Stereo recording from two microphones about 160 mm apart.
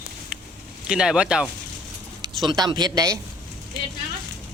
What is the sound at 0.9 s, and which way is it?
Speech, 5° right (ahead or behind).